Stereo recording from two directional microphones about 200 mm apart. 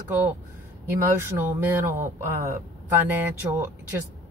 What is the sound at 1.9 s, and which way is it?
Speech, 40° right (ahead or behind).